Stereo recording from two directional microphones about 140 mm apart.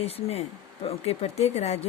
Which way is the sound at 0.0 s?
50° left (ahead or behind).